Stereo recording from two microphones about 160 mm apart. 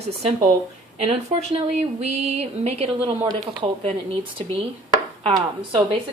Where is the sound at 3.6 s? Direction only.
30° right (ahead or behind).